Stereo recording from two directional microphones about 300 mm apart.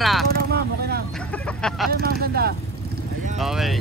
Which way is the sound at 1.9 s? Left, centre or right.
Right.